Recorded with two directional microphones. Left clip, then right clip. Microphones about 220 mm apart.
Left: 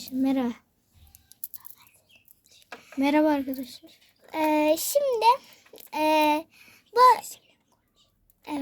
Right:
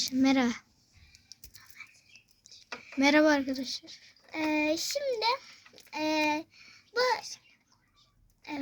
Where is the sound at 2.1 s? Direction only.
50° left (ahead or behind).